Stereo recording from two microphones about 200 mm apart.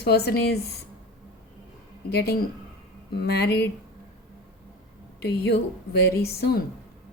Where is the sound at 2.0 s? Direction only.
55° left (ahead or behind).